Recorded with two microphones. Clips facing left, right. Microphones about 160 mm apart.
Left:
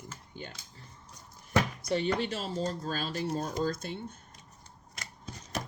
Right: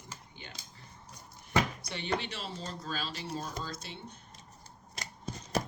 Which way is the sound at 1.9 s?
40° left (ahead or behind).